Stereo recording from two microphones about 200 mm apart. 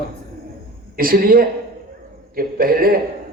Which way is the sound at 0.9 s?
45° right (ahead or behind).